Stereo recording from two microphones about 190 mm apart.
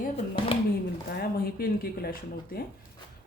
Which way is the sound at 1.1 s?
55° left (ahead or behind).